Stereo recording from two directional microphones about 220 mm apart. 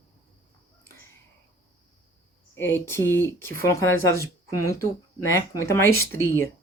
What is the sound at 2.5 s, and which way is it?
Speech, 10° left (ahead or behind).